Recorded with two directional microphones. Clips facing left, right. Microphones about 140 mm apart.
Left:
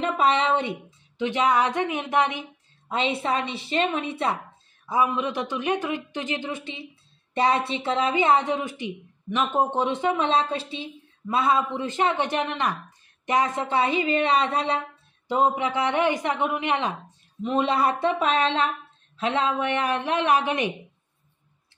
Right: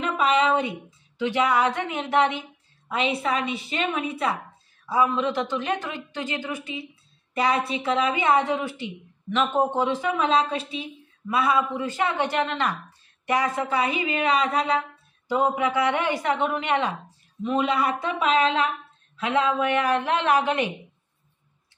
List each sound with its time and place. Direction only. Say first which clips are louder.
0.0 s speech: even; 30° left (ahead or behind); by 2.4 s 15° left (ahead or behind)
2.9 s speech: even; 25° left (ahead or behind)
4.8 s a man's voice: right 1 dB; 15° left (ahead or behind)
17.4 s a woman's voice: left 1 dB; 30° left (ahead or behind)
19.1 s speech: right 1 dB; 25° left (ahead or behind)